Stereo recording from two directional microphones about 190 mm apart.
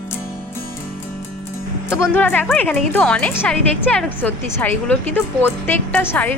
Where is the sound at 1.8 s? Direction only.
10° left (ahead or behind).